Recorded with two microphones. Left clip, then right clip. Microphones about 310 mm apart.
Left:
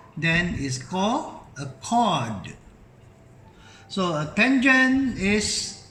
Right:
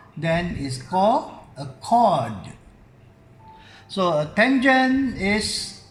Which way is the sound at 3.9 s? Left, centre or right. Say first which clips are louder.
Right 5 dB; right.